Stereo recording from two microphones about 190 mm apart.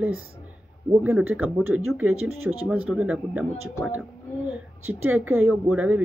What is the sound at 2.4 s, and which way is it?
Speech, 90° right.